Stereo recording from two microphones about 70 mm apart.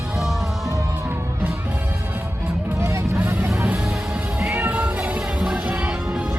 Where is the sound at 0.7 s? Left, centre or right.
Right.